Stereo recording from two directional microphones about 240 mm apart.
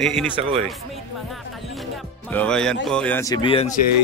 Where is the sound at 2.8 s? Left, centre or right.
Centre; by 3.8 s left.